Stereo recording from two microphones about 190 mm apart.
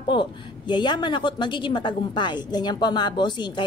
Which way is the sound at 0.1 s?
25° left (ahead or behind).